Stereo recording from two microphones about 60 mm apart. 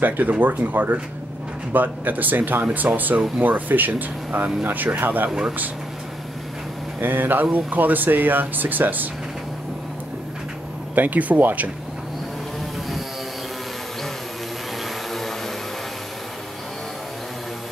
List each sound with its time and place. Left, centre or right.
0.0 s speech: right
7.0 s speech: right
11.0 s speech: right